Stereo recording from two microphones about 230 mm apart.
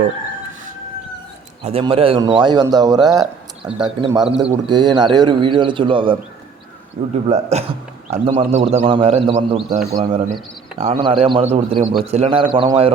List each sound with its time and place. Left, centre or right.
1.6 s a man's voice: right